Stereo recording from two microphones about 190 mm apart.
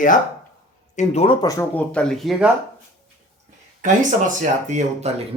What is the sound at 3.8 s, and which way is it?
Speech, 40° right (ahead or behind).